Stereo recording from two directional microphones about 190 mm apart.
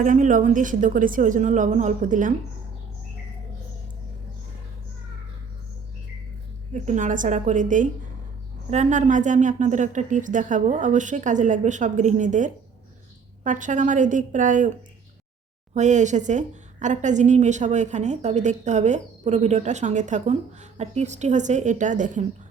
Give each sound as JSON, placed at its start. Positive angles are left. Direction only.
{"t": 0.0, "sound": "a woman's voice", "side_deg": -45}
{"t": 6.7, "sound": "a woman's voice", "side_deg": -40}
{"t": 15.7, "sound": "a woman's voice", "side_deg": -40}